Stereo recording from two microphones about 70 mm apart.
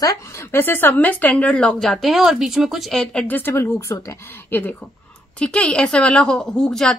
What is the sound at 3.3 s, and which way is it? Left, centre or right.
Speech, left.